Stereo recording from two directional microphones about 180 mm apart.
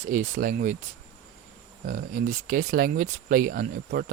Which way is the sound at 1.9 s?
50° right (ahead or behind).